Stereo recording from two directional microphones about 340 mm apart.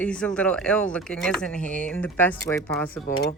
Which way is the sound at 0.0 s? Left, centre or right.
Centre.